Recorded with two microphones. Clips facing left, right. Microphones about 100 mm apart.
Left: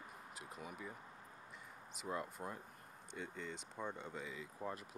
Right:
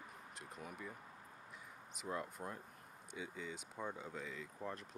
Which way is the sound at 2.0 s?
Centre (ahead or behind).